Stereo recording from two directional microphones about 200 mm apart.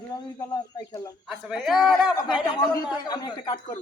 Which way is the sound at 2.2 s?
20° left (ahead or behind).